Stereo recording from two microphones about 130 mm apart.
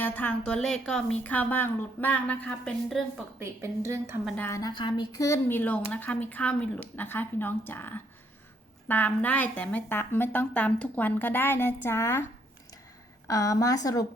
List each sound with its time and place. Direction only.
0.0 s a woman's voice: 15° left (ahead or behind)
3.4 s a woman's voice: 20° right (ahead or behind)
4.4 s a woman's voice: 20° left (ahead or behind)
4.6 s a woman's voice: 35° left (ahead or behind)
5.5 s a woman's voice: 10° left (ahead or behind)
13.2 s a woman's voice: 25° left (ahead or behind)